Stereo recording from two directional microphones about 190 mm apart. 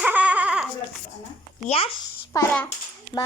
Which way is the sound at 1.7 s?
30° left (ahead or behind).